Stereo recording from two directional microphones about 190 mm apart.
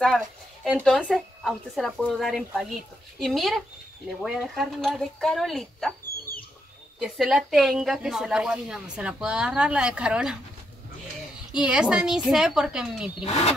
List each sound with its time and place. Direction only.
0.7 s a woman's voice: centre (ahead or behind)
7.0 s a woman's voice: 5° right (ahead or behind)
11.6 s a woman's voice: 5° right (ahead or behind)
13.2 s speech: 35° left (ahead or behind)